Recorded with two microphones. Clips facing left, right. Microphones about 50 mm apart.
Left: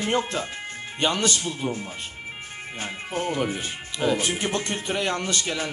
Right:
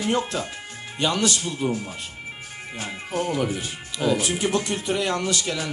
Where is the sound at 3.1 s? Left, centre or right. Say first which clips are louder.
Right 2 dB; left.